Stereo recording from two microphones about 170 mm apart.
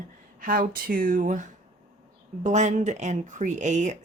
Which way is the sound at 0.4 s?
55° right (ahead or behind).